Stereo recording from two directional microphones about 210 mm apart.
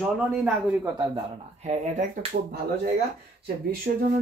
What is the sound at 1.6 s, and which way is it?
Speech, 30° right (ahead or behind).